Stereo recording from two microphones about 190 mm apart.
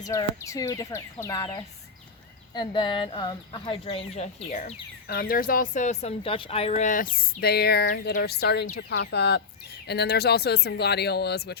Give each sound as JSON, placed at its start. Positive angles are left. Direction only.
{"t": 0.0, "sound": "speech", "side_deg": 15}
{"t": 5.0, "sound": "speech", "side_deg": 50}